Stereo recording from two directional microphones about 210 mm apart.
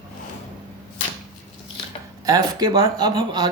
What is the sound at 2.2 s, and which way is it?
Speech, 20° right (ahead or behind).